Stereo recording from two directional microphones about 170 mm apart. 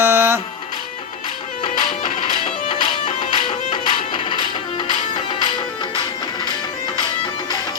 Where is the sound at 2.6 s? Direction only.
25° left (ahead or behind).